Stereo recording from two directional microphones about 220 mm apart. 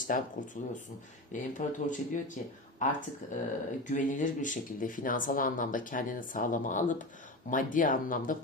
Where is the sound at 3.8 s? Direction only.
35° left (ahead or behind).